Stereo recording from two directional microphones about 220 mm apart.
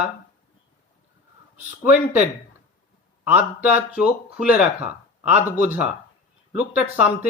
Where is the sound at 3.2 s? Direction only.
5° right (ahead or behind).